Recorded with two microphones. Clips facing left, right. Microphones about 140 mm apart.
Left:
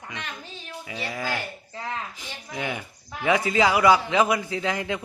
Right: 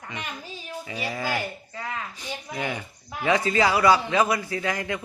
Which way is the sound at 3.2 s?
15° left (ahead or behind).